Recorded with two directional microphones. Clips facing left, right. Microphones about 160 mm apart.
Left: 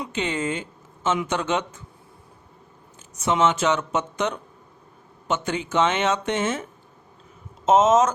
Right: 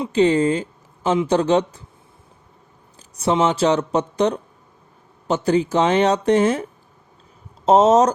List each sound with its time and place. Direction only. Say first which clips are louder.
0.0 s speech: right 10 dB; 35° right (ahead or behind)
3.2 s speech: right 3 dB; 35° right (ahead or behind)